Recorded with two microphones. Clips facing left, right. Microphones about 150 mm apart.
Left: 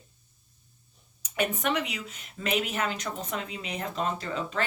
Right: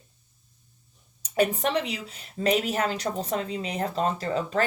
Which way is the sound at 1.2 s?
35° right (ahead or behind).